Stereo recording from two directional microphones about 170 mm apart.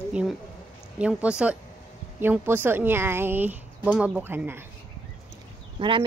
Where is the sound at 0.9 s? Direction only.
5° right (ahead or behind).